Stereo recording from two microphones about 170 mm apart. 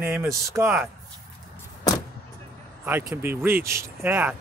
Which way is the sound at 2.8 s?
15° right (ahead or behind).